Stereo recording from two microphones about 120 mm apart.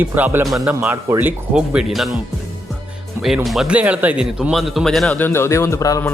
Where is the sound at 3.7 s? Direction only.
10° right (ahead or behind); by 5.2 s 5° left (ahead or behind).